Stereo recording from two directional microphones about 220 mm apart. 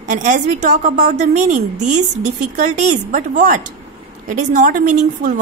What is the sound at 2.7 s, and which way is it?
A woman's voice, 35° right (ahead or behind).